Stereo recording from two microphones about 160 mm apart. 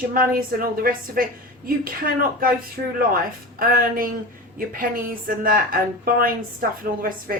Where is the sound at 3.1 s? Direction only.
65° right (ahead or behind).